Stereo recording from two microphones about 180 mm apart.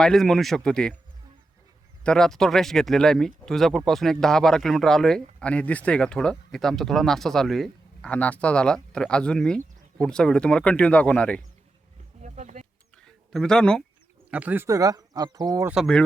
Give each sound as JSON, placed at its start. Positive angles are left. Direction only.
{"t": 0.0, "sound": "speech", "side_deg": 0}
{"t": 2.0, "sound": "speech", "side_deg": 5}
{"t": 12.2, "sound": "wild animals", "side_deg": -40}
{"t": 13.0, "sound": "a sound", "side_deg": 5}
{"t": 14.3, "sound": "speech", "side_deg": -10}
{"t": 15.7, "sound": "speech", "side_deg": 0}